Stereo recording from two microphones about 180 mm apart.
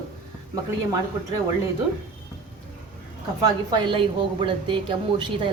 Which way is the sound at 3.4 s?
30° right (ahead or behind).